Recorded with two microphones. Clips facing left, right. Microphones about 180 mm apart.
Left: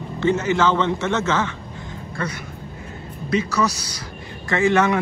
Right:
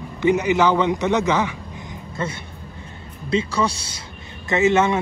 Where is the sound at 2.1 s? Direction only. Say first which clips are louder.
Right 1 dB; 25° right (ahead or behind).